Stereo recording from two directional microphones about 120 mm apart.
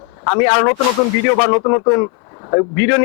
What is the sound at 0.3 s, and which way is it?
A man's voice, 20° left (ahead or behind).